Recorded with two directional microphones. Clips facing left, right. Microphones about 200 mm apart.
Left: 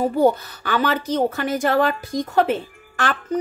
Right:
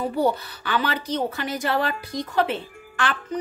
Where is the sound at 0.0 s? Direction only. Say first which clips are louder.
Left 5 dB; 45° left (ahead or behind).